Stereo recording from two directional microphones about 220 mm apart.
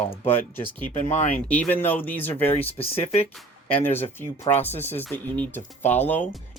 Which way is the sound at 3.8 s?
10° left (ahead or behind).